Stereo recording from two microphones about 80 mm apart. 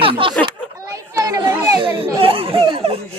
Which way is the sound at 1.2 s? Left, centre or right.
Right.